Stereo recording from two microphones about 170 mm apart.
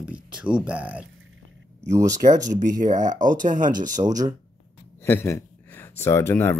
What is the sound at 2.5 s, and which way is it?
Speech, 50° right (ahead or behind).